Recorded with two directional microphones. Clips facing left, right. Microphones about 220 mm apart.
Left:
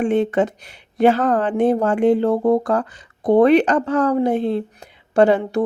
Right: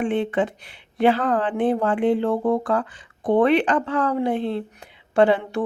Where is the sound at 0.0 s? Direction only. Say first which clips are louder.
Left 4 dB; 45° left (ahead or behind).